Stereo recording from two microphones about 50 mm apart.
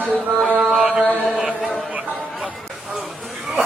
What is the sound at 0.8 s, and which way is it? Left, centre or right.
Mantra, centre.